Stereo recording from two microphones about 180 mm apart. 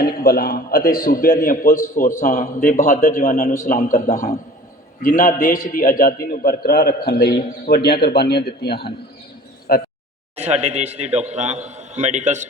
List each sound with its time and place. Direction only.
0.0 s a man's voice: 55° left (ahead or behind)
10.3 s a man's voice: 35° right (ahead or behind)